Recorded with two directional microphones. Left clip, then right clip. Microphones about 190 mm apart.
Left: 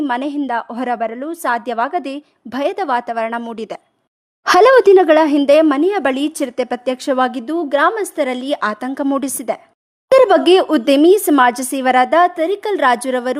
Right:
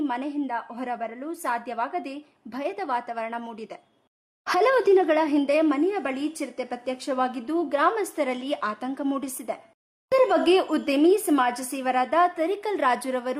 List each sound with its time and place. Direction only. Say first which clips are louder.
0.0 s speech: left 9 dB; 45° left (ahead or behind)